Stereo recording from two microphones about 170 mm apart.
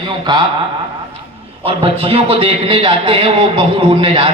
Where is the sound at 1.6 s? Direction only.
35° right (ahead or behind).